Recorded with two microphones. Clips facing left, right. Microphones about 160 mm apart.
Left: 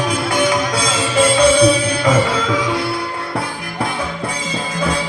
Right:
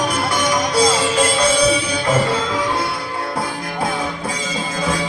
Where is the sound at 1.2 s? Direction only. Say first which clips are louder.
Left 8 dB; 60° left (ahead or behind).